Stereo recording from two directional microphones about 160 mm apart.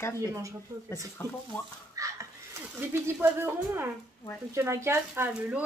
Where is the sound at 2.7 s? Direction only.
15° right (ahead or behind).